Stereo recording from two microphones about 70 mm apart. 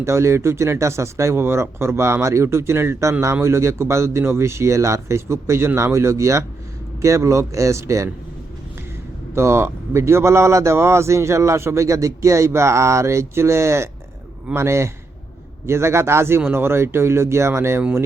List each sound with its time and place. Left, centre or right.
0.0 s speech: right
9.3 s speech: right